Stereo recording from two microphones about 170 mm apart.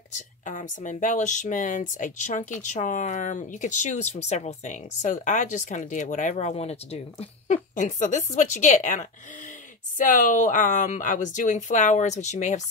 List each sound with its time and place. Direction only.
0.1 s speech: 50° left (ahead or behind)